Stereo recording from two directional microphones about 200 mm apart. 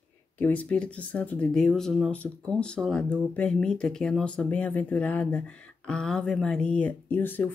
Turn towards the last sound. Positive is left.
turn(degrees=10)  # may be behind; listen again after turning